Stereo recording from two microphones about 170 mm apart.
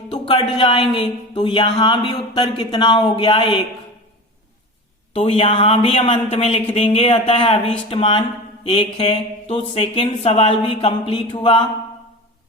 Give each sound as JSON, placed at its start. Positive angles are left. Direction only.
{"t": 0.1, "sound": "speech", "side_deg": 30}
{"t": 5.1, "sound": "speech", "side_deg": 35}